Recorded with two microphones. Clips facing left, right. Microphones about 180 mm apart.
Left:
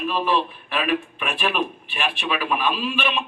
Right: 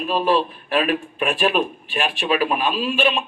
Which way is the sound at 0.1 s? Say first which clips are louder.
Right 6 dB; 45° right (ahead or behind).